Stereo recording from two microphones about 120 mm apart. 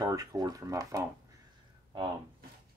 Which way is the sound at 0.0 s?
30° right (ahead or behind).